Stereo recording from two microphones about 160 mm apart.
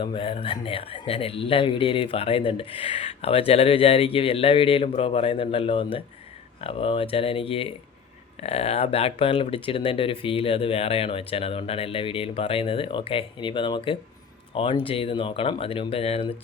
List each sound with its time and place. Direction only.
0.0 s speech: 30° left (ahead or behind)